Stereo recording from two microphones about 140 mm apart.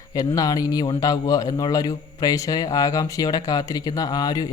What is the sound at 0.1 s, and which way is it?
A man's voice, 25° left (ahead or behind).